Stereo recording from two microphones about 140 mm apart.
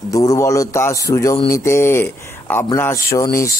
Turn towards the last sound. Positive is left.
turn(degrees=20)  # may be behind; listen again after turning